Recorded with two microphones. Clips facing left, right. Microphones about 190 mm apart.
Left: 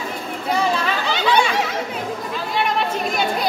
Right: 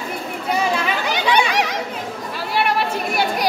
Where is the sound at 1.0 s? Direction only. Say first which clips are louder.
Left 1 dB; 15° right (ahead or behind).